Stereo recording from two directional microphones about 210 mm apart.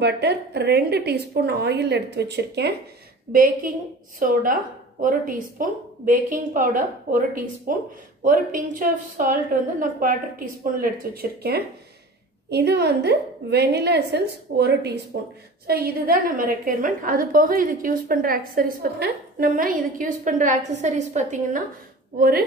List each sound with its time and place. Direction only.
0.0 s a woman's voice: 50° right (ahead or behind); by 21.6 s 35° right (ahead or behind)